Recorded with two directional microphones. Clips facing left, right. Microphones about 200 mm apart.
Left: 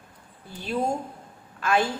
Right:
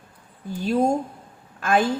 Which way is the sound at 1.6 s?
50° right (ahead or behind).